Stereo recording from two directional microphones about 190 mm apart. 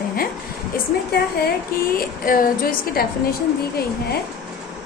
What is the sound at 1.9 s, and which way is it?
A woman's voice, 50° left (ahead or behind).